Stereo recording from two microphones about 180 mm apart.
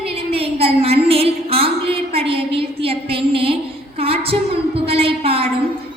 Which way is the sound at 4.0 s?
30° right (ahead or behind).